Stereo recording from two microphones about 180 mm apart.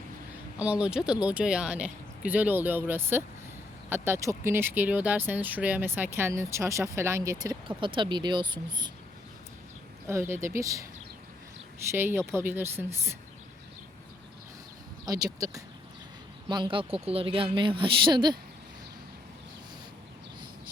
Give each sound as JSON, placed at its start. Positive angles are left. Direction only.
{"t": 0.6, "sound": "speech", "side_deg": -5}
{"t": 7.8, "sound": "speech", "side_deg": -25}
{"t": 10.1, "sound": "speech", "side_deg": -15}
{"t": 11.9, "sound": "speech", "side_deg": -10}
{"t": 15.0, "sound": "speech", "side_deg": -20}